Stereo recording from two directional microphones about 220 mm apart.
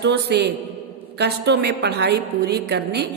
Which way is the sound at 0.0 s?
50° right (ahead or behind).